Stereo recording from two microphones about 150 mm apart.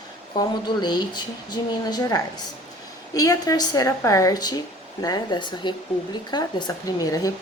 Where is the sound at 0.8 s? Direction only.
30° left (ahead or behind).